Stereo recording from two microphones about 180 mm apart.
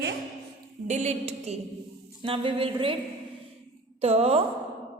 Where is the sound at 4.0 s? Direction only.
35° right (ahead or behind).